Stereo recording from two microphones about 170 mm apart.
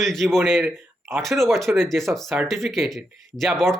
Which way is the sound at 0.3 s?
10° right (ahead or behind).